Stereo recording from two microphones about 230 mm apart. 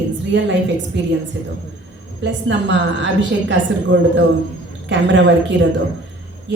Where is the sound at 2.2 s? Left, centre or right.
Right.